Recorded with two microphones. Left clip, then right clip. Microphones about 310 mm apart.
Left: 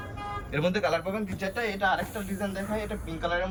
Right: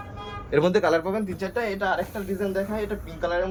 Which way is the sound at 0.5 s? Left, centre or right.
Centre.